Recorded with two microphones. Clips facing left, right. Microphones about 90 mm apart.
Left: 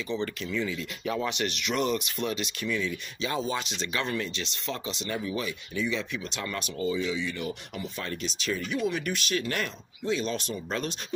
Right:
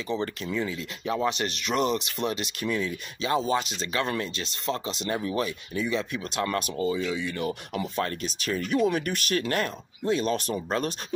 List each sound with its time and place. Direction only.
0.1 s speech: 35° right (ahead or behind)